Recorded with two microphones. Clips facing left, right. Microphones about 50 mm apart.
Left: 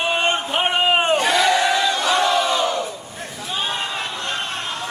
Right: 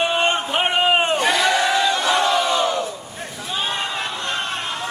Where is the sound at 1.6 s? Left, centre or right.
Right.